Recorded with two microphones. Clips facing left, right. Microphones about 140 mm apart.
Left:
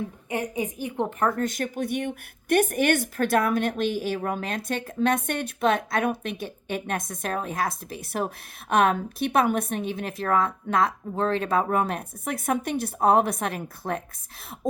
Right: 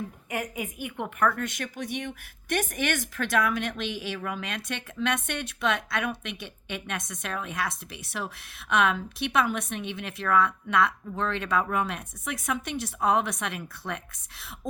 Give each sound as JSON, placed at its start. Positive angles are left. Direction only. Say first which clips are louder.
{"t": 0.3, "sound": "a woman's voice", "louder": "left 5 dB", "side_deg": 30}
{"t": 1.5, "sound": "a woman's voice", "louder": "left 6 dB", "side_deg": 45}